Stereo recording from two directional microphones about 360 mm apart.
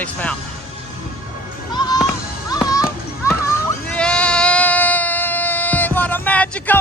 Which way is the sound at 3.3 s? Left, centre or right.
Centre.